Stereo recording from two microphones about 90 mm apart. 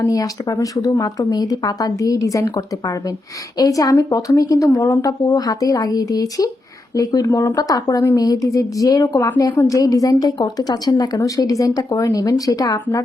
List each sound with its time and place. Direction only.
0.0 s speech: 40° left (ahead or behind)
7.3 s speech: 25° left (ahead or behind)
7.5 s speech: 40° left (ahead or behind)